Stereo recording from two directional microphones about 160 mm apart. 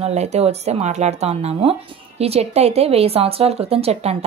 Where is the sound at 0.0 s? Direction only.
45° right (ahead or behind).